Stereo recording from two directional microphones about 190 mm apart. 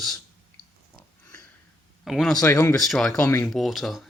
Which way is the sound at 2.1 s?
Centre (ahead or behind).